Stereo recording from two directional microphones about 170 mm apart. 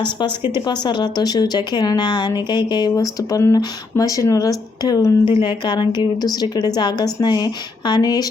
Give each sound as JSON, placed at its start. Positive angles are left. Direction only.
{"t": 0.0, "sound": "a woman's voice", "side_deg": 25}